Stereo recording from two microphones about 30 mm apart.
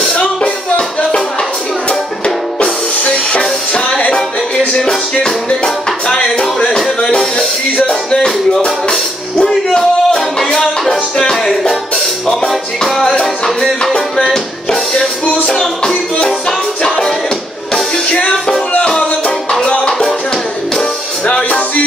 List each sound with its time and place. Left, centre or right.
0.1 s music: left
3.0 s music: left
9.5 s music: centre
12.4 s music: centre
14.2 s music: centre
18.0 s music: left
21.3 s music: left